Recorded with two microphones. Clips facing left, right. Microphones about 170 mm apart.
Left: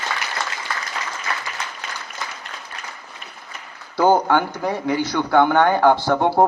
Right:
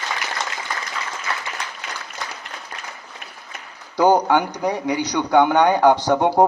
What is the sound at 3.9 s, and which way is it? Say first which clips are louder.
A man's voice: even; 15° right (ahead or behind).